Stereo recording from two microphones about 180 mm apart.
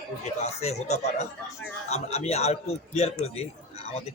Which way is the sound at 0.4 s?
35° left (ahead or behind).